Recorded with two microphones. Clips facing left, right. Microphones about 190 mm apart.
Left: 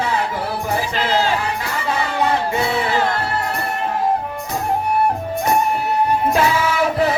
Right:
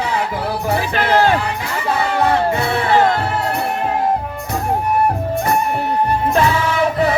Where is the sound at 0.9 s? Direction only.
60° right (ahead or behind).